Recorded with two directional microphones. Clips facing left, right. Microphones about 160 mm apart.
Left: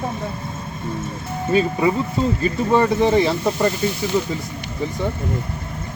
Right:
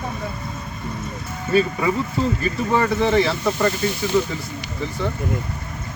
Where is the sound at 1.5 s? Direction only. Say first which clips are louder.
Left 1 dB; 20° left (ahead or behind).